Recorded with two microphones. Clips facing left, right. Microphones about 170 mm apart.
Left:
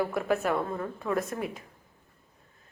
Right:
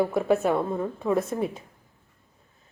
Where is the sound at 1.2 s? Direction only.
30° right (ahead or behind).